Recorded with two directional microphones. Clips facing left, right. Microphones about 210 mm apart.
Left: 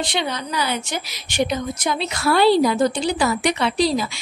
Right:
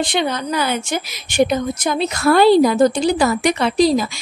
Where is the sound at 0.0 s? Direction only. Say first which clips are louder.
Right 5 dB; 50° right (ahead or behind).